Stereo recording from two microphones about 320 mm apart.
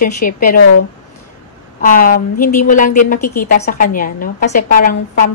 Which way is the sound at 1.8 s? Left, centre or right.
Left.